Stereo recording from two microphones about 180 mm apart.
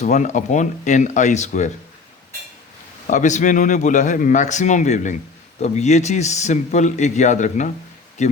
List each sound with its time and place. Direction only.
0.0 s a man's voice: 40° left (ahead or behind)
3.1 s a man's voice: 45° left (ahead or behind)